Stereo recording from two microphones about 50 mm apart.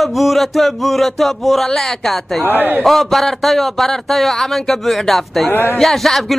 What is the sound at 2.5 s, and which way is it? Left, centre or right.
Speech, right.